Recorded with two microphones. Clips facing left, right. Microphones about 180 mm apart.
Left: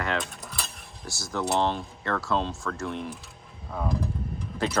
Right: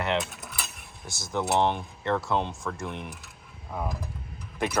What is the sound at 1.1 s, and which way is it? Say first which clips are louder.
Speech: right 1 dB; 20° right (ahead or behind).